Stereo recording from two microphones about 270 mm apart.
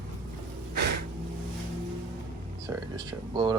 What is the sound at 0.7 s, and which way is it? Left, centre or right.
Music, right.